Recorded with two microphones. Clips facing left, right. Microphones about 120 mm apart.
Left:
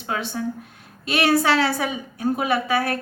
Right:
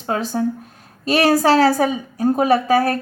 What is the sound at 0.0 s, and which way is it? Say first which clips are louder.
A woman's voice: right 6 dB; 40° right (ahead or behind).